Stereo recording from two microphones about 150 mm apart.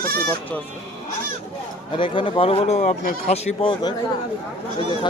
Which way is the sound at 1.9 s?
35° left (ahead or behind).